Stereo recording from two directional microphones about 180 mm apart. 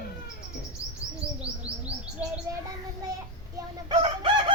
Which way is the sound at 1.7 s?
65° right (ahead or behind).